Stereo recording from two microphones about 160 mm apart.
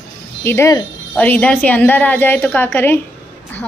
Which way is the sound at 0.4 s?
15° left (ahead or behind).